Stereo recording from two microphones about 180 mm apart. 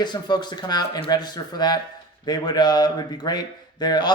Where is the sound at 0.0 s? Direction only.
25° left (ahead or behind).